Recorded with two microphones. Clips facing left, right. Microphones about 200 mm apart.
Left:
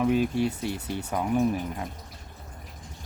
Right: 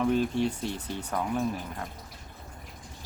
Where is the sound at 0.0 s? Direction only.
10° left (ahead or behind).